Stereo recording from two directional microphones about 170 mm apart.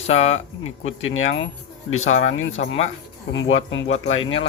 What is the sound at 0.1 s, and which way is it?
Speech, 40° left (ahead or behind).